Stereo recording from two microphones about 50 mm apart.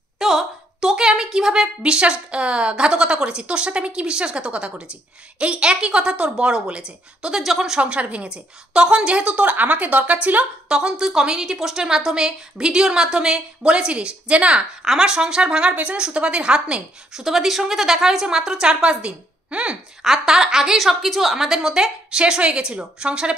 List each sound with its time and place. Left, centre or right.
0.2 s a woman's voice: centre
7.8 s a woman's voice: right
10.8 s a woman's voice: centre
20.0 s a woman's voice: centre